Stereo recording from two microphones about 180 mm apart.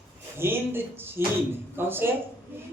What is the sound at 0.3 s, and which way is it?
A woman's voice, 10° right (ahead or behind).